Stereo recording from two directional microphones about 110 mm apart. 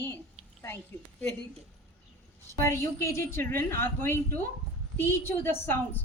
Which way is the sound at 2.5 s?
25° left (ahead or behind).